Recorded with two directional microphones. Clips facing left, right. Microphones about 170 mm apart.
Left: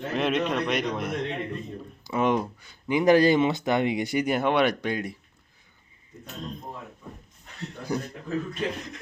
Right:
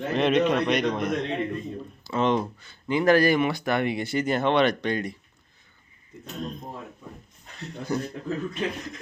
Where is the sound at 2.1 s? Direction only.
10° left (ahead or behind).